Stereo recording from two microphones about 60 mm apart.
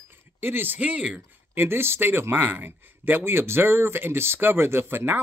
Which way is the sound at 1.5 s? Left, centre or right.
Right.